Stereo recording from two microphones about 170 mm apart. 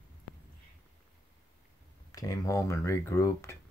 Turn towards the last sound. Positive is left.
turn(degrees=15)  # may be behind; listen again after turning